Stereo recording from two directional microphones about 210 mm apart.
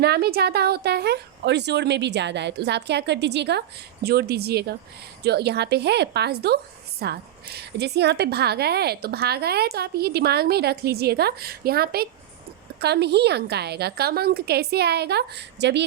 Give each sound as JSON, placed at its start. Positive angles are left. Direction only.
{"t": 0.0, "sound": "a woman's voice", "side_deg": -50}